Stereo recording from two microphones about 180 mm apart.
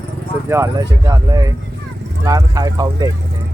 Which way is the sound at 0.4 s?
15° right (ahead or behind).